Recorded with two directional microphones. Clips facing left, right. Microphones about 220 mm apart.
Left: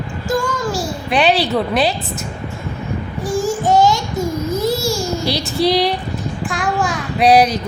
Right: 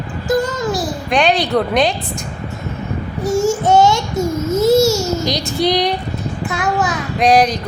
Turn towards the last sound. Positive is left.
turn(degrees=5)  # may be behind; listen again after turning